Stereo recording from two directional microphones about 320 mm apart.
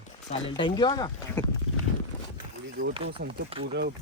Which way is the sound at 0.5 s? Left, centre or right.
Centre.